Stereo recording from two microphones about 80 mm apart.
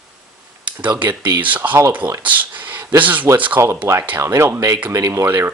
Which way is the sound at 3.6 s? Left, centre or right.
Right.